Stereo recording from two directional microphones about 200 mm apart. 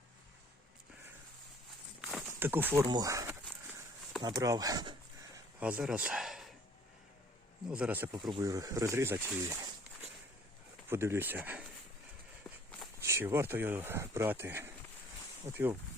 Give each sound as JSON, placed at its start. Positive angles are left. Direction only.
{"t": 2.0, "sound": "a sound", "side_deg": 0}
{"t": 2.4, "sound": "speech", "side_deg": -10}
{"t": 5.5, "sound": "speech", "side_deg": -5}
{"t": 7.7, "sound": "speech", "side_deg": -5}
{"t": 10.8, "sound": "speech", "side_deg": -10}
{"t": 13.0, "sound": "speech", "side_deg": -15}